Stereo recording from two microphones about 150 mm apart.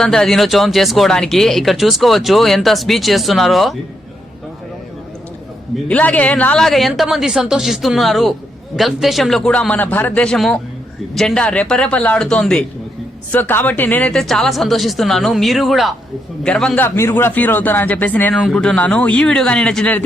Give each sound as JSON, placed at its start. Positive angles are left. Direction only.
{"t": 0.0, "sound": "a woman's voice", "side_deg": 5}
{"t": 5.9, "sound": "a woman's voice", "side_deg": 10}